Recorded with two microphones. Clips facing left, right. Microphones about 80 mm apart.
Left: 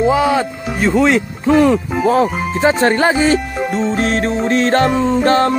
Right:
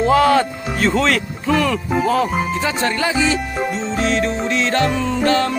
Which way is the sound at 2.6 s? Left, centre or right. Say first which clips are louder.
Left 7 dB; left.